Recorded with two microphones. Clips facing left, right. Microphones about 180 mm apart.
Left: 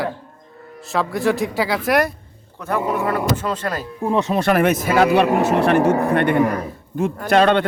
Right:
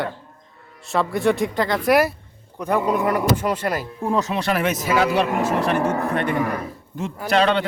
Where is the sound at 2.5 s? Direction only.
15° right (ahead or behind).